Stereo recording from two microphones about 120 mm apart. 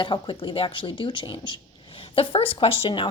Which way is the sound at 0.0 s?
40° left (ahead or behind).